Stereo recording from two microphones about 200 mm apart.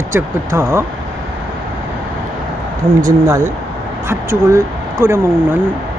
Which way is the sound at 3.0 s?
15° right (ahead or behind).